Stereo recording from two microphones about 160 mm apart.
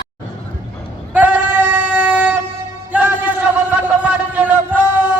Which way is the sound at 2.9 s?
10° right (ahead or behind).